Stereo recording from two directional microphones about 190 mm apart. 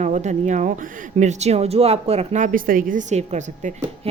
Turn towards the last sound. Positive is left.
turn(degrees=-30)  # may be behind; listen again after turning